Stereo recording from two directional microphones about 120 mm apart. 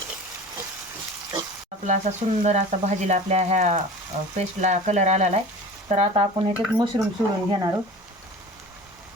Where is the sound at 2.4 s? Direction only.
75° right (ahead or behind).